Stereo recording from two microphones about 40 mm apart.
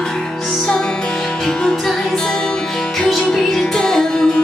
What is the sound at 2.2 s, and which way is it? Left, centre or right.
Music, centre.